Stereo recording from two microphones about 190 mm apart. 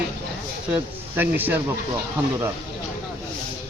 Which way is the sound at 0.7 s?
10° right (ahead or behind).